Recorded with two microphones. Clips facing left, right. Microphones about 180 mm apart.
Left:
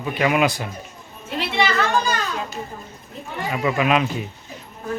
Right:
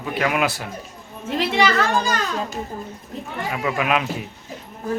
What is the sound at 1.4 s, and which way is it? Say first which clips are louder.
Speech: right 2 dB; 45° right (ahead or behind).